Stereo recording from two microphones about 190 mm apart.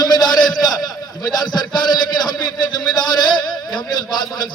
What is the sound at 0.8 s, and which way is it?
A man's voice, 20° left (ahead or behind).